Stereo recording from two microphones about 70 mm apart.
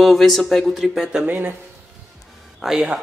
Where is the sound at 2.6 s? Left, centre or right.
Centre.